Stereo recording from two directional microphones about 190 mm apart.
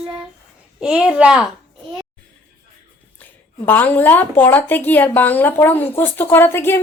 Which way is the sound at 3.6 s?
10° left (ahead or behind).